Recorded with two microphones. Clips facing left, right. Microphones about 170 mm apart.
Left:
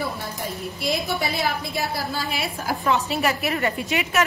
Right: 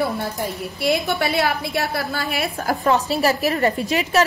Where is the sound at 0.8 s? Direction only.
65° right (ahead or behind).